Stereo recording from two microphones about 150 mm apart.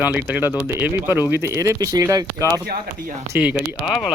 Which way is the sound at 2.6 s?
85° right.